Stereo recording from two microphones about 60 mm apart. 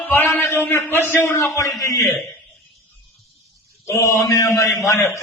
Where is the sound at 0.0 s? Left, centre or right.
Left.